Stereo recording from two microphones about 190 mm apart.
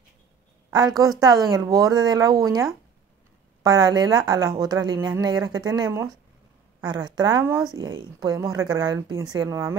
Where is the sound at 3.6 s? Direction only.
20° right (ahead or behind).